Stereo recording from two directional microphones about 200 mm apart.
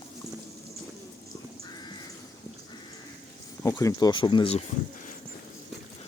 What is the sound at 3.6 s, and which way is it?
Speech, 15° left (ahead or behind).